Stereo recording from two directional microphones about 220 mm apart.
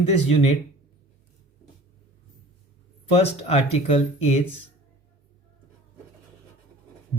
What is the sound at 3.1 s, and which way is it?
Speech, 30° left (ahead or behind).